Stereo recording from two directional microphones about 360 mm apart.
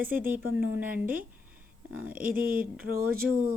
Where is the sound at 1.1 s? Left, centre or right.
Right.